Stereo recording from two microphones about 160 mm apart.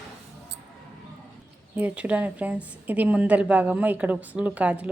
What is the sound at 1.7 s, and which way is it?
A woman's voice, 10° right (ahead or behind).